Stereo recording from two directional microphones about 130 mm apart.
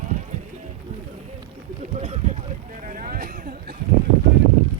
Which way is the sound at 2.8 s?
80° right.